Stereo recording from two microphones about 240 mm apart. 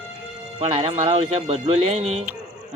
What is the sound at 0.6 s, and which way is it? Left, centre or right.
Speech, right.